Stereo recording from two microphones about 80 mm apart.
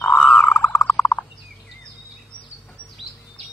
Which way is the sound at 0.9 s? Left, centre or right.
Centre.